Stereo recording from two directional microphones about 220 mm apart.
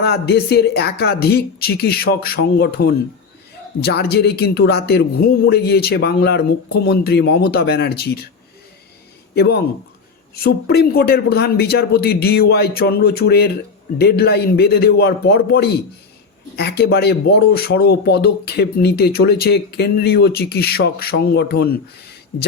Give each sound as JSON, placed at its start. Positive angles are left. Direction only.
{"t": 0.0, "sound": "speech", "side_deg": 45}
{"t": 9.3, "sound": "speech", "side_deg": 45}